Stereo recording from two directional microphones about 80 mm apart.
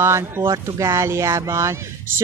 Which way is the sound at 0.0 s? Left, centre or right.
Right.